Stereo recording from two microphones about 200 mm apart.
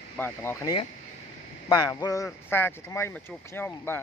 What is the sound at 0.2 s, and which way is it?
A man's voice, 10° left (ahead or behind).